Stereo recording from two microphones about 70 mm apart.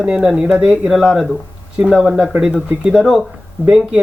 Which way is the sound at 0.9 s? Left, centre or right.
Centre.